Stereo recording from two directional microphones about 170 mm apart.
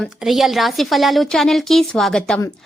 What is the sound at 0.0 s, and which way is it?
A woman's voice, centre (ahead or behind).